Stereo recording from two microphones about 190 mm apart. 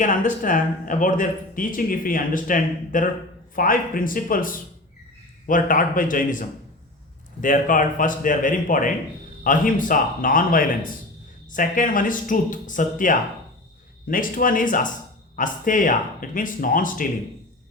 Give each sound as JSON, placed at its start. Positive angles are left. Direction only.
{"t": 0.0, "sound": "speech", "side_deg": 45}
{"t": 7.4, "sound": "speech", "side_deg": 45}